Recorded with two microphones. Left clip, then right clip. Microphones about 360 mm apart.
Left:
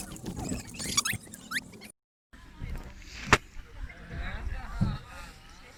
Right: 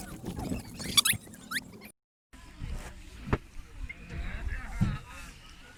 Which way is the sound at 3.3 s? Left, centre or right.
Left.